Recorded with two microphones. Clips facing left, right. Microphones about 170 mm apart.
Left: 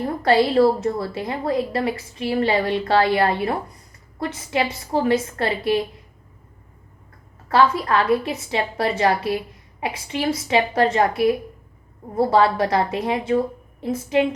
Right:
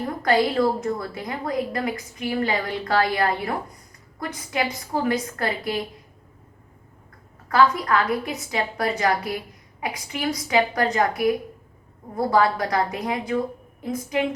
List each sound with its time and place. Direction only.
0.0 s a woman's voice: 30° left (ahead or behind)
7.4 s a sound: 30° left (ahead or behind)
7.9 s a woman's voice: 25° left (ahead or behind)